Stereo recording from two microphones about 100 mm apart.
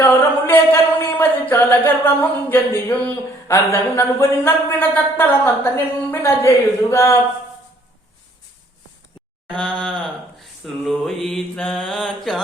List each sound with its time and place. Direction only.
0.0 s a sound: 20° left (ahead or behind)
2.8 s speech: 25° left (ahead or behind)
9.6 s groan: 5° left (ahead or behind)
10.6 s mantra: 5° left (ahead or behind)